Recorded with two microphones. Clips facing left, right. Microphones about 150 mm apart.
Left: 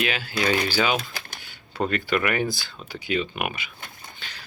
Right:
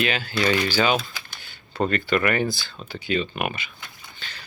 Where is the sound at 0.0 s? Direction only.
5° left (ahead or behind).